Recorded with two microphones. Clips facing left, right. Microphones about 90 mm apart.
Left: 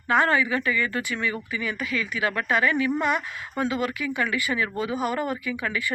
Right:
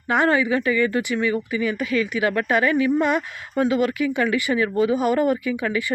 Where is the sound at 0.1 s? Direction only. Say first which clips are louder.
Right 3 dB; 25° right (ahead or behind).